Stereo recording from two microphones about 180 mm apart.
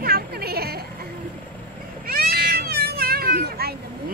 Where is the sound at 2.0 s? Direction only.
55° right (ahead or behind).